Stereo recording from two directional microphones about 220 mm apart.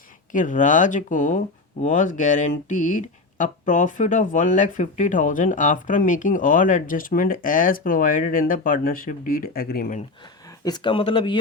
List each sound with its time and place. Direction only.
0.3 s speech: 35° left (ahead or behind)
10.6 s speech: 20° left (ahead or behind)